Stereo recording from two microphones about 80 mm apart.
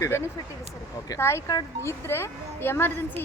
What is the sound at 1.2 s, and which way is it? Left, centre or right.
A woman's voice, left.